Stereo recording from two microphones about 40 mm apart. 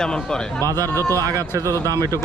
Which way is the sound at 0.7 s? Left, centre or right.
Left.